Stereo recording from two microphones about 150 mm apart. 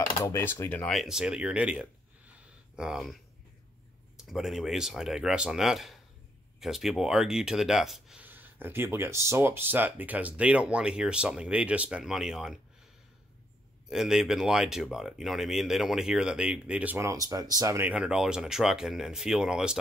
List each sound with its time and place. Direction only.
0.2 s speech: 20° left (ahead or behind)
0.9 s speech: 5° right (ahead or behind)
4.3 s speech: centre (ahead or behind)
13.8 s speech: 5° right (ahead or behind)